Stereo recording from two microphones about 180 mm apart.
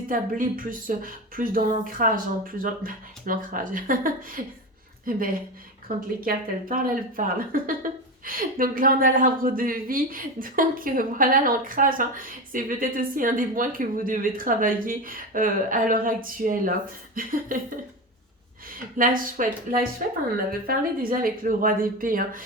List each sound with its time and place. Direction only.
0.1 s speech: 50° right (ahead or behind)
18.7 s speech: 50° right (ahead or behind)